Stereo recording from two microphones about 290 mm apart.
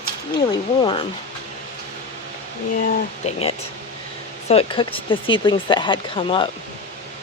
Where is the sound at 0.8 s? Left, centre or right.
Centre.